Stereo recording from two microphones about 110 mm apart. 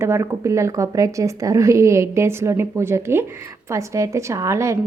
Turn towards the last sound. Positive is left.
turn(degrees=-25)  # may be behind; listen again after turning